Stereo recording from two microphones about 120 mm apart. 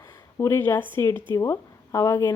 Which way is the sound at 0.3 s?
25° left (ahead or behind).